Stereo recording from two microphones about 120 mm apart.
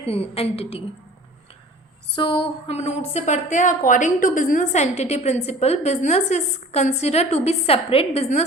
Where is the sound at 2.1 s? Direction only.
45° left (ahead or behind).